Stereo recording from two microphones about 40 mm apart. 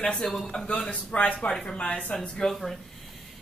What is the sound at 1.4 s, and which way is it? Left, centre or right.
Speech, left.